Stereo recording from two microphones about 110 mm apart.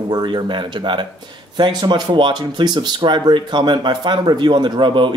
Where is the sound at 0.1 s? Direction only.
40° right (ahead or behind).